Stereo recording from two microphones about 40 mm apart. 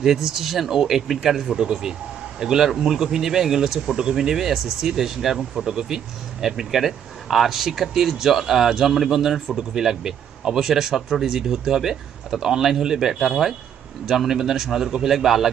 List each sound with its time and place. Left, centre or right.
0.0 s speech: centre
1.5 s speech: centre